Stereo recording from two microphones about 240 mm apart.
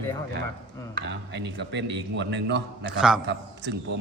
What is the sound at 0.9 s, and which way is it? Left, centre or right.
A man's voice, right.